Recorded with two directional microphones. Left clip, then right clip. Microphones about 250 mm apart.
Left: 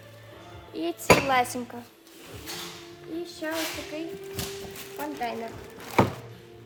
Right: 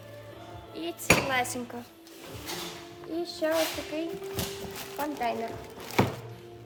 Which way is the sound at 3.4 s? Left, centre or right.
Centre.